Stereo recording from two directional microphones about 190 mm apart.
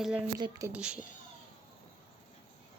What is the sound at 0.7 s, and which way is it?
Speech, 5° right (ahead or behind).